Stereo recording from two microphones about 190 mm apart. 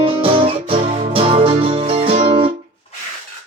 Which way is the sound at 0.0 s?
30° right (ahead or behind).